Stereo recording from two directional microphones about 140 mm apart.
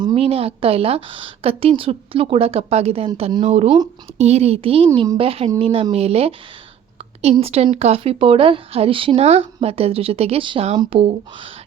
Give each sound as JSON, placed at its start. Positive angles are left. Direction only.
{"t": 0.0, "sound": "a woman's voice", "side_deg": -40}